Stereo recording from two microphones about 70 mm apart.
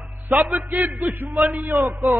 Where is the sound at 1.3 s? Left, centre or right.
Centre.